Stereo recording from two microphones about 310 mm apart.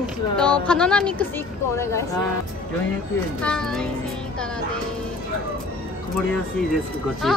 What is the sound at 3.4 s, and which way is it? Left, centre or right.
Speech, centre.